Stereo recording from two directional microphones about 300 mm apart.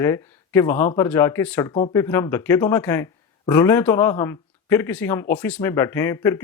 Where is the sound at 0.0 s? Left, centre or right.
Centre.